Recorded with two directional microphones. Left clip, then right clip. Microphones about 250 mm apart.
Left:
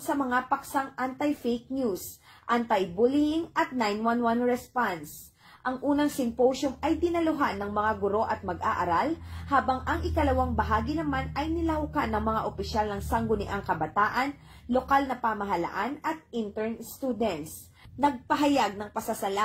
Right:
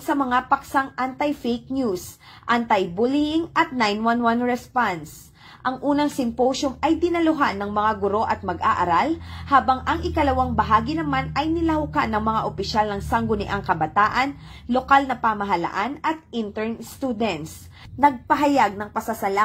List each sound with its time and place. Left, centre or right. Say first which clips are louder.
0.0 s a woman's voice: right 6 dB; centre
18.6 s a woman's voice: right 8 dB; right